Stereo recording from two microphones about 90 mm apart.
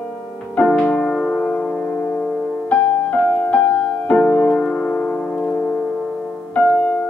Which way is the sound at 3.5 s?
15° left (ahead or behind).